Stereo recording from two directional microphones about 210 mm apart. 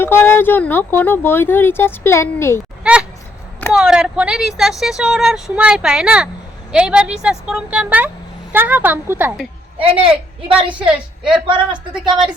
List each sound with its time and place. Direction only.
0.0 s speech: 10° left (ahead or behind)
2.8 s a woman's voice: 5° right (ahead or behind)
9.7 s a woman's voice: 25° right (ahead or behind)
10.8 s speech: 5° right (ahead or behind)
11.4 s a woman's voice: 25° right (ahead or behind)